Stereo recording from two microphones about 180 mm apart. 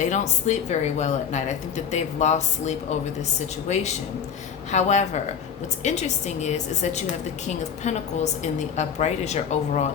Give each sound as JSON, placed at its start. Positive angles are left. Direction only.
{"t": 0.0, "sound": "speech", "side_deg": 40}